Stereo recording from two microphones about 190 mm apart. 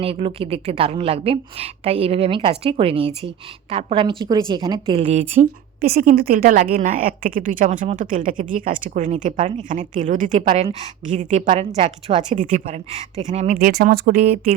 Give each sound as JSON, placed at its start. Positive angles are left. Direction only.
{"t": 0.0, "sound": "a woman's voice", "side_deg": -30}
{"t": 5.8, "sound": "a woman's voice", "side_deg": -50}
{"t": 13.6, "sound": "a woman's voice", "side_deg": -50}